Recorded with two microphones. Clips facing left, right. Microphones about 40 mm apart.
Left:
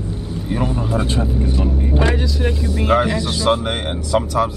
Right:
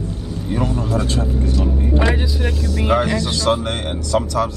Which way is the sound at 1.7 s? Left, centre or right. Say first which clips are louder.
Even; centre.